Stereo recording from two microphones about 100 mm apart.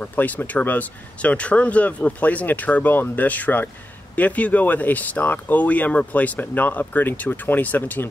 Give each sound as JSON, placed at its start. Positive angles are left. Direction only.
{"t": 0.0, "sound": "speech", "side_deg": 15}